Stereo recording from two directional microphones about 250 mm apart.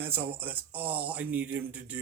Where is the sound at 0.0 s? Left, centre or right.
Centre.